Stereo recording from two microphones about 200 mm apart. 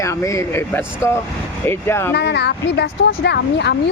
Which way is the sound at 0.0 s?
15° left (ahead or behind).